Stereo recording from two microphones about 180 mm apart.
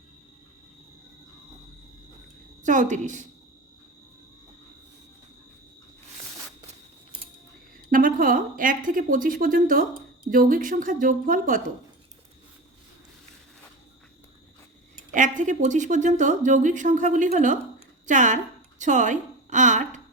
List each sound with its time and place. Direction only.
2.6 s speech: 45° right (ahead or behind)
7.9 s speech: 50° right (ahead or behind)
15.1 s a woman's voice: 45° right (ahead or behind)